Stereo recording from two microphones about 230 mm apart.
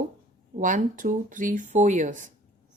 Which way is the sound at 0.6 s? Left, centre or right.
Right.